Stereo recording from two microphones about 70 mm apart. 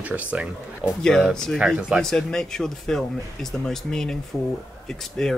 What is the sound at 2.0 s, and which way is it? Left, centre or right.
Speech, centre.